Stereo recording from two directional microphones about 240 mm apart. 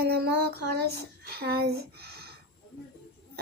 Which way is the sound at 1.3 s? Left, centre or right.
Right.